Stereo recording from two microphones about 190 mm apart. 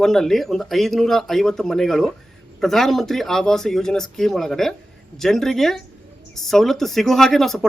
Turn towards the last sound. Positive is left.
turn(degrees=0)  # may be behind; listen again after turning